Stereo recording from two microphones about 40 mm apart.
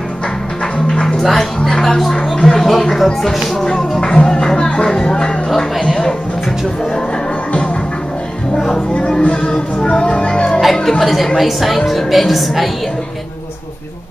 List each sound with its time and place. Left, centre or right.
0.7 s music: centre
1.2 s a woman's voice: centre
3.6 s music: centre
8.5 s music: centre
8.9 s speech: centre
10.8 s a woman's voice: centre